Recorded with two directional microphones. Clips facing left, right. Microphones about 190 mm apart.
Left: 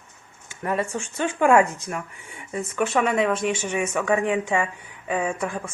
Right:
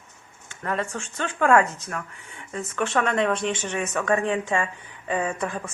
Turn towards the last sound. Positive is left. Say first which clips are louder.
# left 1 dB
turn(degrees=10)  # may be behind; listen again after turning